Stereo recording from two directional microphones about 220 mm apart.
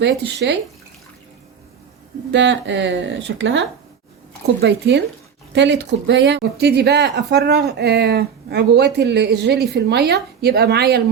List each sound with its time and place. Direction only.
0.0 s speech: 50° right (ahead or behind)
2.3 s speech: 55° right (ahead or behind)
4.6 s speech: 50° right (ahead or behind)